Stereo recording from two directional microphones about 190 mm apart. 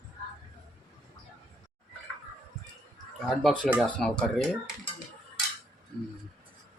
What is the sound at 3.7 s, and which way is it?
Speech, centre (ahead or behind).